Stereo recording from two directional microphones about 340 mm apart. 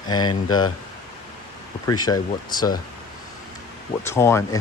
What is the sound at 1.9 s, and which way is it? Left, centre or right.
Speech, centre.